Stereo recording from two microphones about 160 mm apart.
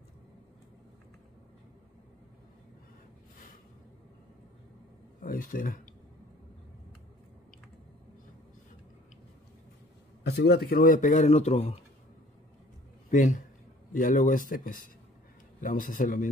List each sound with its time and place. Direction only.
5.2 s speech: 60° left (ahead or behind)
10.2 s speech: 90° left; by 11.7 s 45° left (ahead or behind)
13.1 s a man's voice: 50° left (ahead or behind)